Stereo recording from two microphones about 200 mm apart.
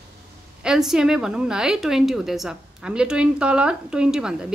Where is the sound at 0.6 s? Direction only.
Centre (ahead or behind).